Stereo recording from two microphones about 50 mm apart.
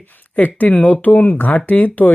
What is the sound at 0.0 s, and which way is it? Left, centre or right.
Speech, left.